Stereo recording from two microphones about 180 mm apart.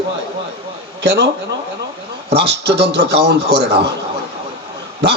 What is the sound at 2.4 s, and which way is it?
A man's voice, 70° right (ahead or behind).